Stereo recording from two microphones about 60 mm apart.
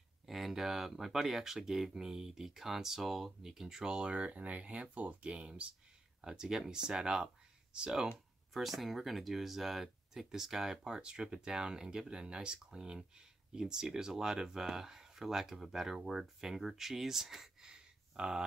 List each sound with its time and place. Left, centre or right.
0.3 s speech: centre
8.5 s speech: centre